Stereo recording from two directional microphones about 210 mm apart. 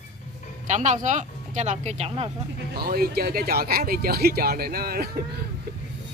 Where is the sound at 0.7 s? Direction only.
35° right (ahead or behind).